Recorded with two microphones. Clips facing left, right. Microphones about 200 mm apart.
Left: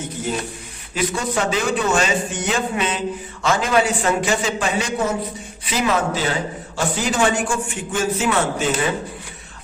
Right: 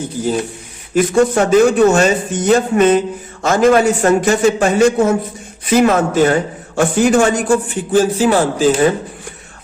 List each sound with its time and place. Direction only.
0.2 s speech: 30° right (ahead or behind)
0.9 s a man's voice: 50° right (ahead or behind); by 8.7 s 35° right (ahead or behind)